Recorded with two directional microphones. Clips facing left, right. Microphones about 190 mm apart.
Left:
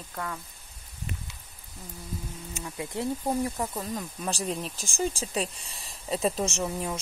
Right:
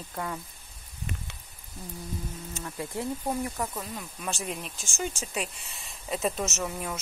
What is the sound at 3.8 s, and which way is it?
Speech, 35° left (ahead or behind).